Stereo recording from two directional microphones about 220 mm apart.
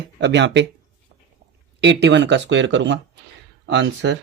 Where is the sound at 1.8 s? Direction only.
50° right (ahead or behind).